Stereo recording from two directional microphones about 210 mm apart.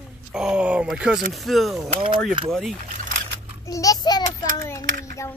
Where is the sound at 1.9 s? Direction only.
25° right (ahead or behind).